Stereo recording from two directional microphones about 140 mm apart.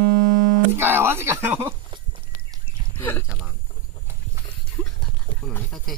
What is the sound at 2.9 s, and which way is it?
Speech, 15° left (ahead or behind).